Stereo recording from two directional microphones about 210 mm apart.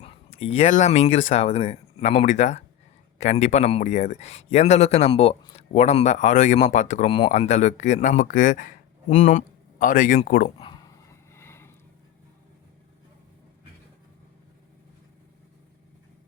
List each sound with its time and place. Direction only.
0.0 s speech: 30° left (ahead or behind)
10.6 s dog: 20° left (ahead or behind)